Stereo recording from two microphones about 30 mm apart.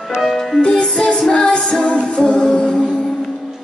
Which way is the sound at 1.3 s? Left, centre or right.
Left.